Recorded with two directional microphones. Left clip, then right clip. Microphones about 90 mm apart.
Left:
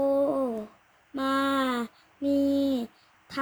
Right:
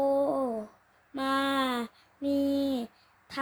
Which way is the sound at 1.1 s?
40° right (ahead or behind).